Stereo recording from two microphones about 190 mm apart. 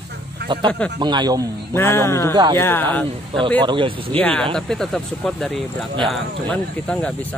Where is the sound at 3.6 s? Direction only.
25° right (ahead or behind).